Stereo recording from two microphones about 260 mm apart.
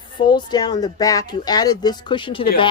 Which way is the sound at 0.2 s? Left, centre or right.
Centre.